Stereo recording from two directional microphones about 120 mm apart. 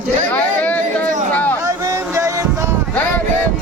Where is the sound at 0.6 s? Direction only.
10° left (ahead or behind).